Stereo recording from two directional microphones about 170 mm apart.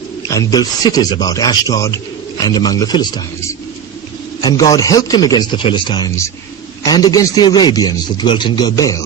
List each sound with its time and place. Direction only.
0.3 s a man's voice: 20° left (ahead or behind)
4.4 s a man's voice: 20° left (ahead or behind)